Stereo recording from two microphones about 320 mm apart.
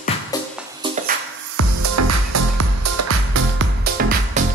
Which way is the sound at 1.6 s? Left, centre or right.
Right.